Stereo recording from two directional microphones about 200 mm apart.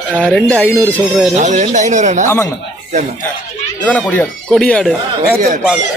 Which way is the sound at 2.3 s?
15° left (ahead or behind).